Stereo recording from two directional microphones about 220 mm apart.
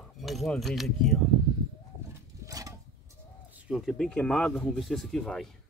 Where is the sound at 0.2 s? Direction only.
Centre (ahead or behind).